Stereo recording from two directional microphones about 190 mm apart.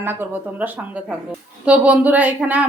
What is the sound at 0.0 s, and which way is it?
A woman's voice, 10° right (ahead or behind).